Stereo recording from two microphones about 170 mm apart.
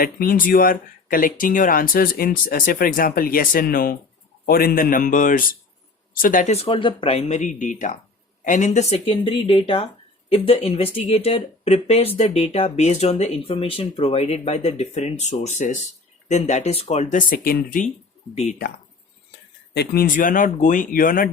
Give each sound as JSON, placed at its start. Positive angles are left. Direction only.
{"t": 0.0, "sound": "speech", "side_deg": 55}
{"t": 19.7, "sound": "speech", "side_deg": 70}